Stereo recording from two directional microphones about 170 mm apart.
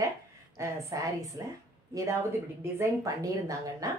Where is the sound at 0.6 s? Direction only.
20° right (ahead or behind).